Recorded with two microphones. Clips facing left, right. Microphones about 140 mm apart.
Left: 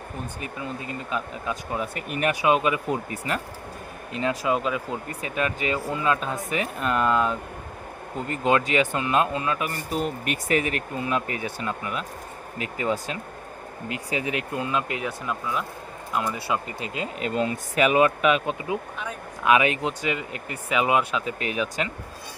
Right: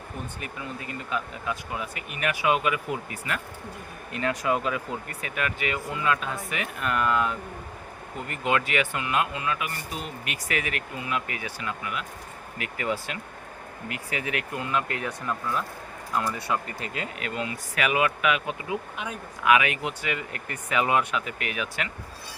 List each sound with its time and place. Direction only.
0.4 s speech: 25° left (ahead or behind)
2.4 s speech: 25° left (ahead or behind)